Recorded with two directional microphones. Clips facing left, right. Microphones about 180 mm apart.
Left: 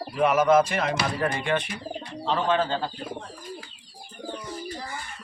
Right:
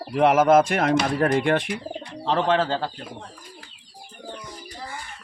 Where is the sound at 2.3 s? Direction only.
80° right.